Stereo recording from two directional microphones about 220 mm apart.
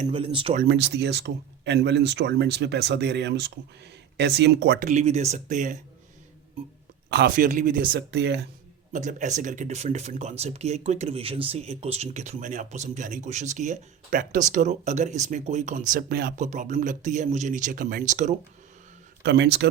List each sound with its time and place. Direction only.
0.0 s speech: 25° right (ahead or behind)
0.7 s speech: 50° right (ahead or behind)
4.9 s speech: 30° right (ahead or behind)
7.1 s speech: 45° right (ahead or behind)
8.9 s speech: 35° right (ahead or behind)
19.2 s speech: 50° right (ahead or behind)